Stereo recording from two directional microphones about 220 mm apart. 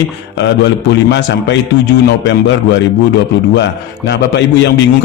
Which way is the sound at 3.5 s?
50° left (ahead or behind).